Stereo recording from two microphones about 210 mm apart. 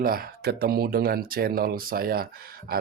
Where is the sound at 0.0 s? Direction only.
45° right (ahead or behind).